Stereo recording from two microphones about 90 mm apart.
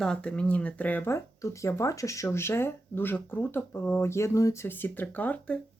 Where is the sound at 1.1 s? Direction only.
35° left (ahead or behind); by 5.5 s 20° left (ahead or behind).